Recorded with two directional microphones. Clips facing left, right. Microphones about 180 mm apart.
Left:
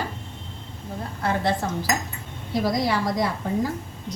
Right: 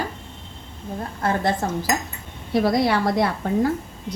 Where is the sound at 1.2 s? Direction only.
45° right (ahead or behind).